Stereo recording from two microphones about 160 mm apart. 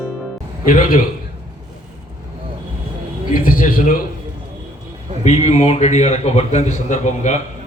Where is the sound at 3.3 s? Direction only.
60° left (ahead or behind).